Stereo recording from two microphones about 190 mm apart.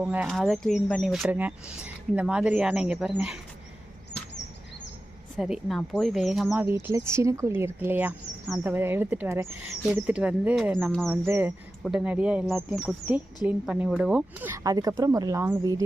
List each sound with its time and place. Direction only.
0.0 s speech: 5° right (ahead or behind)
5.4 s speech: centre (ahead or behind)
11.3 s speech: 10° right (ahead or behind)